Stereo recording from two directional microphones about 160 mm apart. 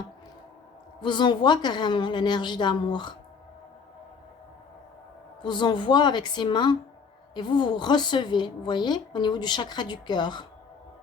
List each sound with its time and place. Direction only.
1.0 s a woman's voice: 30° left (ahead or behind)
5.4 s a woman's voice: 30° left (ahead or behind)